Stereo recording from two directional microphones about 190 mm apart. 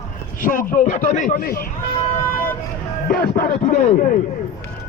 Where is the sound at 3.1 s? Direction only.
50° left (ahead or behind).